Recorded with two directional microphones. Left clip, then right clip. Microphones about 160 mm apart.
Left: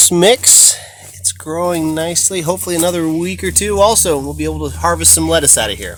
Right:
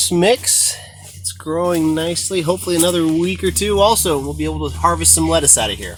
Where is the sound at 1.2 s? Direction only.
35° left (ahead or behind).